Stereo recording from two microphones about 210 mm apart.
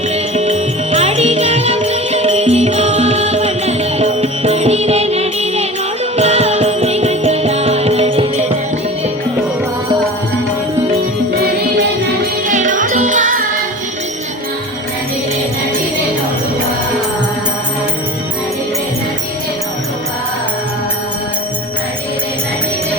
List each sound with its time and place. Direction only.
0.3 s music: 30° right (ahead or behind)
12.5 s music: 40° right (ahead or behind)